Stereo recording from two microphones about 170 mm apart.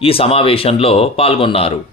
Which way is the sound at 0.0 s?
35° left (ahead or behind).